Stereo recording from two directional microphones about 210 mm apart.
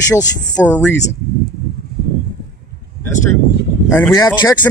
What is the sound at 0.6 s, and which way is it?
Speech, 5° left (ahead or behind).